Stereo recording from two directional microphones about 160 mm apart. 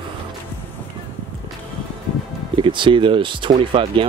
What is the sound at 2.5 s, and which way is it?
Speech, 30° right (ahead or behind).